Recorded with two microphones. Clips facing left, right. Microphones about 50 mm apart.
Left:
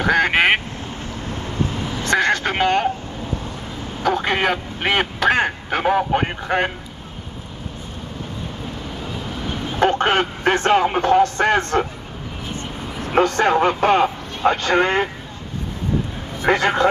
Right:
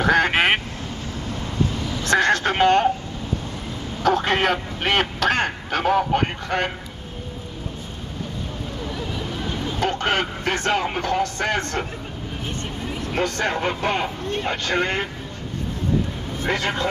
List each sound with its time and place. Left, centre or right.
0.0 s quack: centre
1.2 s duck: left
2.0 s a sound: centre
4.0 s speech: centre
9.5 s a man's voice: left
13.0 s speech: left
16.5 s a man's voice: left